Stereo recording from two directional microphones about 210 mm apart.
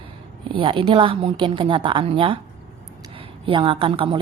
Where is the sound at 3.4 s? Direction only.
25° right (ahead or behind).